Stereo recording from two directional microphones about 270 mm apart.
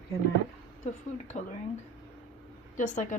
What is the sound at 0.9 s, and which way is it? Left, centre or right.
A woman's voice, left.